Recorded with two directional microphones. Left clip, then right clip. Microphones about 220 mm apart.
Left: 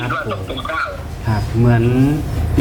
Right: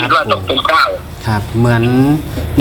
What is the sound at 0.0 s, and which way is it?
Speech, 50° right (ahead or behind).